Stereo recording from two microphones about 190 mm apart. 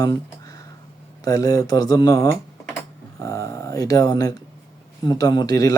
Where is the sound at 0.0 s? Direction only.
20° left (ahead or behind).